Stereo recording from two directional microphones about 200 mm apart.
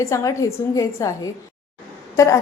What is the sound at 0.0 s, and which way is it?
Speech, 15° left (ahead or behind).